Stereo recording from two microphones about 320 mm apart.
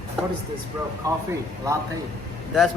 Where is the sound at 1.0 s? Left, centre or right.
Centre.